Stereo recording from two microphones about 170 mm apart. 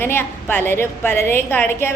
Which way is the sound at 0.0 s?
15° left (ahead or behind).